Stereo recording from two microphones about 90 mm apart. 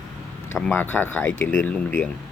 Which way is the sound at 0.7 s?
20° left (ahead or behind).